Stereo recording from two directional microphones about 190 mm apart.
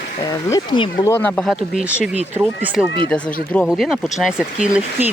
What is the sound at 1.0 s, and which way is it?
Speech, 15° left (ahead or behind).